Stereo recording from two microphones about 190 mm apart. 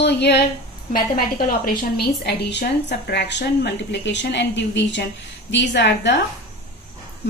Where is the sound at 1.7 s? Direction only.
55° left (ahead or behind).